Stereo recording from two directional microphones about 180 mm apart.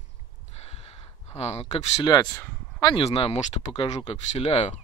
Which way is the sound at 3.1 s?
35° left (ahead or behind).